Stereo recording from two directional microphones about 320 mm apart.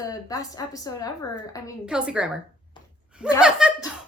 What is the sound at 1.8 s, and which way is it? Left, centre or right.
Speech, centre.